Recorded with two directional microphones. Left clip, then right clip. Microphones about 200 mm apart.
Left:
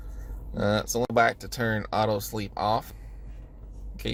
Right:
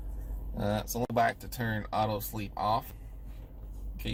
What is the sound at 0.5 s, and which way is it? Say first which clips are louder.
Speech: left 7 dB; 45° left (ahead or behind).